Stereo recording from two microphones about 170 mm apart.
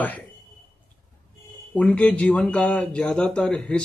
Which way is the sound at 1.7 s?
10° left (ahead or behind).